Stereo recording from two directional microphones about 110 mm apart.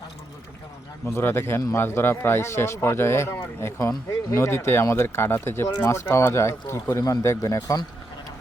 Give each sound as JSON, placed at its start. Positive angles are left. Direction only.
{"t": 1.0, "sound": "speech", "side_deg": 25}